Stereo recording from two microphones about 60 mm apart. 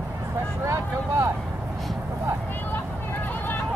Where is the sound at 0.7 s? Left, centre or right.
Right.